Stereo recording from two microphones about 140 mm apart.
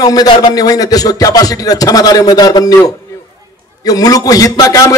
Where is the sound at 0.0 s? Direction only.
25° left (ahead or behind).